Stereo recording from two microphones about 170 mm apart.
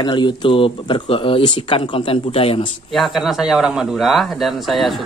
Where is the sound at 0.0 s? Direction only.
25° left (ahead or behind).